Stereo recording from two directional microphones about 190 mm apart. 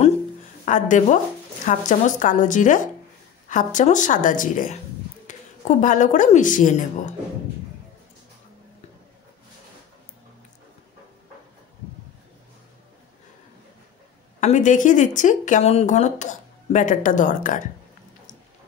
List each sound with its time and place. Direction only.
0.7 s a woman's voice: 40° left (ahead or behind)
14.4 s speech: 40° left (ahead or behind)